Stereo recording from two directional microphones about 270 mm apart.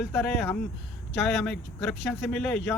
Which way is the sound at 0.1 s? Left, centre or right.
Centre.